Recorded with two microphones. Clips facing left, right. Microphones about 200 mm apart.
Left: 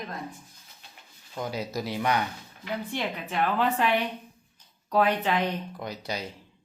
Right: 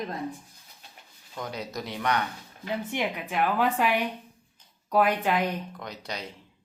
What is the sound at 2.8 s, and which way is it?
A woman's voice, 15° right (ahead or behind).